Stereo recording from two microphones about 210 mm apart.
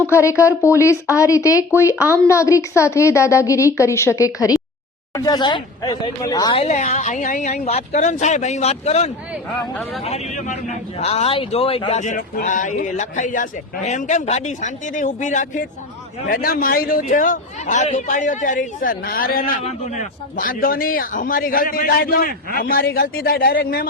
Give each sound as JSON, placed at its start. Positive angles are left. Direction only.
{"t": 0.1, "sound": "a woman's voice", "side_deg": 15}